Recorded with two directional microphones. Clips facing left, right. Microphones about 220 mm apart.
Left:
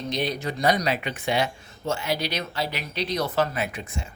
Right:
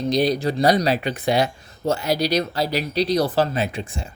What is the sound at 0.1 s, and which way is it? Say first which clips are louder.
Speech: right 8 dB; 35° right (ahead or behind).